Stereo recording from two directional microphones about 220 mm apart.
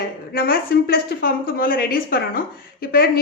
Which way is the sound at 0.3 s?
40° left (ahead or behind).